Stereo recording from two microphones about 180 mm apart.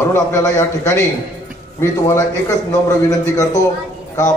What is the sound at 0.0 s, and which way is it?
A man's voice, 15° left (ahead or behind).